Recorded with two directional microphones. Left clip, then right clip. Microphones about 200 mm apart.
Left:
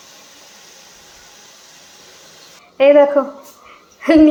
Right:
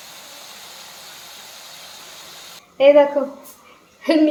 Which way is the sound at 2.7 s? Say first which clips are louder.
Left 3 dB; 10° left (ahead or behind).